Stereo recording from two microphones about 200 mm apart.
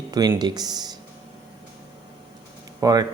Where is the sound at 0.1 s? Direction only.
20° right (ahead or behind).